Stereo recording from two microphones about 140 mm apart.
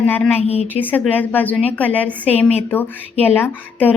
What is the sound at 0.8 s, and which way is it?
Speech, 15° left (ahead or behind).